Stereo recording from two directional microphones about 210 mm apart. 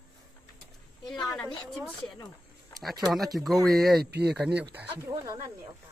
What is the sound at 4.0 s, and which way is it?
Speech, 50° right (ahead or behind).